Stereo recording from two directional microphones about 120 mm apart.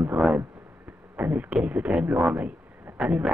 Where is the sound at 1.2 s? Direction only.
15° right (ahead or behind).